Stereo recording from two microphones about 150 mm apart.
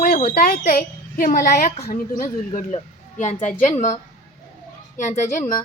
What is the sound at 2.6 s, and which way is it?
Speech, 50° left (ahead or behind).